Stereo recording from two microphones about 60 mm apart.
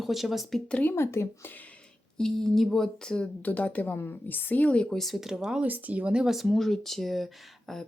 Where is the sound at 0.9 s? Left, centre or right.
Left.